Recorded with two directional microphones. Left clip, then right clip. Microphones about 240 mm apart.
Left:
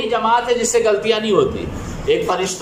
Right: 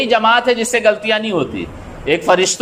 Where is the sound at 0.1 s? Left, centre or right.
Right.